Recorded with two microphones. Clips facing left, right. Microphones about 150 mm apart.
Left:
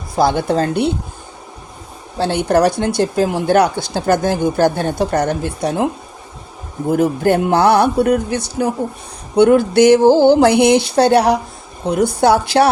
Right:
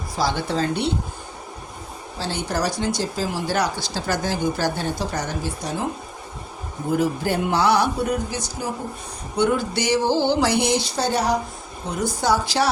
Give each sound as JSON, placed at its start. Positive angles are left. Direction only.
{"t": 0.2, "sound": "speech", "side_deg": 55}
{"t": 2.1, "sound": "speech", "side_deg": 60}
{"t": 6.9, "sound": "speech", "side_deg": 50}